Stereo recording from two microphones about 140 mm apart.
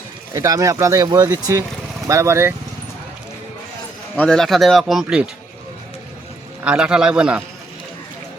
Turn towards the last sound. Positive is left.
turn(degrees=-10)  # may be behind; listen again after turning